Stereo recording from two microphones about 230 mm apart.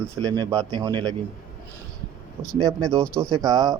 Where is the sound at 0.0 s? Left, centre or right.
Centre.